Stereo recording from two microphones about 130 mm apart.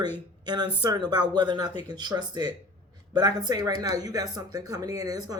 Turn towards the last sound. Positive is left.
turn(degrees=-30)  # may be behind; listen again after turning